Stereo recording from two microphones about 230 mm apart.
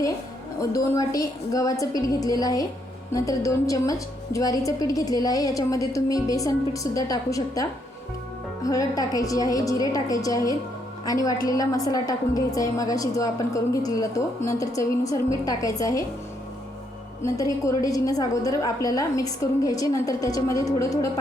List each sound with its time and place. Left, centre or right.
0.6 s a woman's voice: centre
17.2 s a woman's voice: centre